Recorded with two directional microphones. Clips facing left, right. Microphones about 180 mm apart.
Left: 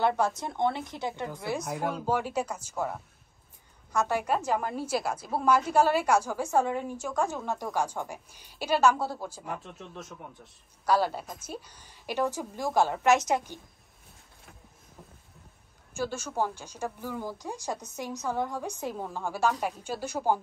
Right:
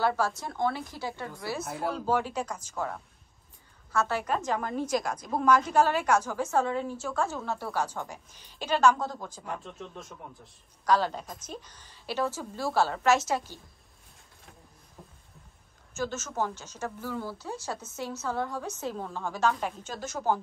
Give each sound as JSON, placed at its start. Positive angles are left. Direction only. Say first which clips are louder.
{"t": 0.0, "sound": "a woman's voice", "louder": "left 1 dB", "side_deg": 20}
{"t": 1.6, "sound": "speech", "louder": "left 1 dB", "side_deg": -5}
{"t": 2.0, "sound": "a woman's voice", "louder": "right 1 dB", "side_deg": 10}
{"t": 15.0, "sound": "a sound", "louder": "even", "side_deg": 0}
{"t": 16.0, "sound": "a woman's voice", "louder": "left 1 dB", "side_deg": 10}